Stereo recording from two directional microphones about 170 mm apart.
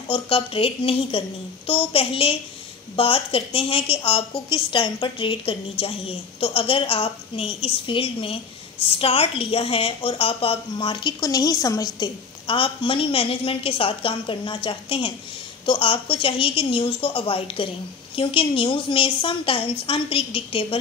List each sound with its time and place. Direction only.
0.1 s a woman's voice: 30° left (ahead or behind)